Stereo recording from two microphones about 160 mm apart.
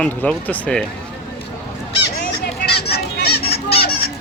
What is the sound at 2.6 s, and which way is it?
Fowl, 90° left.